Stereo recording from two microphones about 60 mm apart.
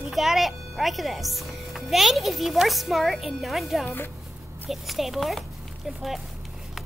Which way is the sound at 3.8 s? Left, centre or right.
Left.